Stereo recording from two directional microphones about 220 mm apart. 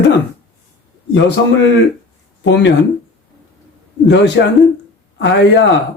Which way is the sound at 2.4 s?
55° left (ahead or behind).